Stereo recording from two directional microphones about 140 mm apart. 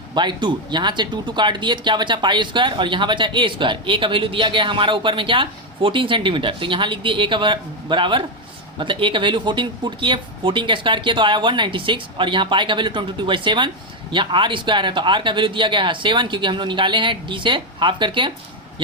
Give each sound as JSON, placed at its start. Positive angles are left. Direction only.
{"t": 0.1, "sound": "speech", "side_deg": -35}